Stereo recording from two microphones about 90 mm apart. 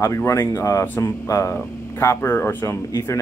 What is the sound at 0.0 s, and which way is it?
Speech, 35° left (ahead or behind).